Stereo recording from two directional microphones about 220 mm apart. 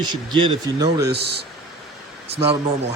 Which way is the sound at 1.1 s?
50° right (ahead or behind).